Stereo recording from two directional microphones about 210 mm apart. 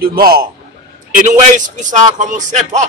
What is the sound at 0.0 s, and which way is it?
A man's voice, 45° right (ahead or behind).